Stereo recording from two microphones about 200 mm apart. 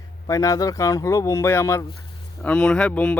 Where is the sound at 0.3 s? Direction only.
15° left (ahead or behind).